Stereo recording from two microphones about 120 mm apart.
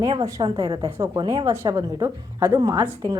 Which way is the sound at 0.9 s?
20° right (ahead or behind).